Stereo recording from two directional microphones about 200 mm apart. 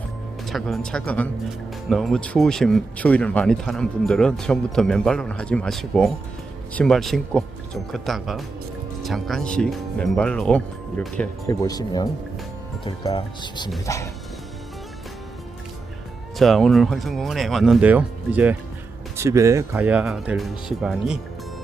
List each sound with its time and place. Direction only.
0.4 s speech: centre (ahead or behind)
11.4 s speech: 15° left (ahead or behind)
16.4 s speech: centre (ahead or behind)